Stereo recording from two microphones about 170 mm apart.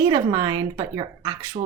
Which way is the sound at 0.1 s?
25° right (ahead or behind).